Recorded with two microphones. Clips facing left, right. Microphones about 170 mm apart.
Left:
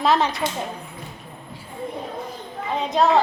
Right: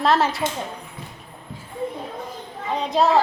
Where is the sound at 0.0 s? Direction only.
Centre (ahead or behind).